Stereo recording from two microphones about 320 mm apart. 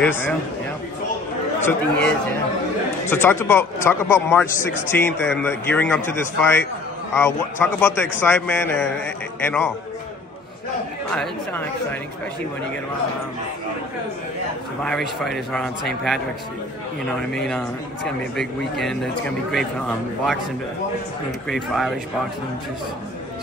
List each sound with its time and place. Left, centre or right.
0.0 s speech: centre
1.6 s a man's voice: centre
4.5 s a man's voice: left
4.9 s a man's voice: centre
11.1 s speech: centre
14.8 s speech: centre
17.3 s speech: centre
21.5 s speech: centre